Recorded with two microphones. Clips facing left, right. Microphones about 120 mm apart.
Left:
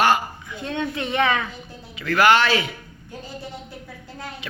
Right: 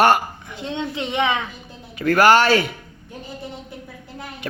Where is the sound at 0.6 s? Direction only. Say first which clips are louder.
Even; 25° right (ahead or behind).